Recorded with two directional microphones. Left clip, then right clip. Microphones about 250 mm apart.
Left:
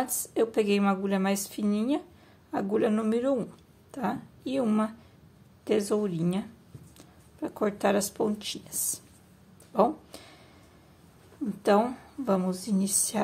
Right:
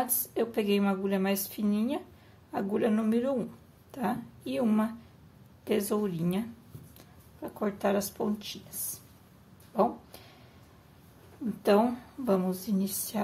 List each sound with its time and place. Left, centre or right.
0.1 s a woman's voice: centre
7.4 s speech: centre
9.8 s a sound: centre
11.6 s a woman's voice: centre